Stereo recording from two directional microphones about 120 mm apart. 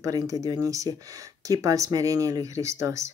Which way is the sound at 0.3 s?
30° right (ahead or behind).